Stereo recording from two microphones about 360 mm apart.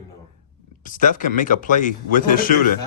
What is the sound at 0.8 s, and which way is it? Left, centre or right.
Speech, left.